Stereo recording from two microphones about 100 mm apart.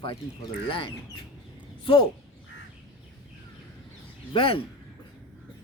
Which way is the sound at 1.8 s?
60° left (ahead or behind).